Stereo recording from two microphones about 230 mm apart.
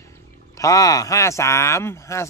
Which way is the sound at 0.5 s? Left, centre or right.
Centre.